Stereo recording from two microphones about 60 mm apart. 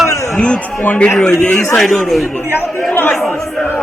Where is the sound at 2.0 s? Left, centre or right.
Centre.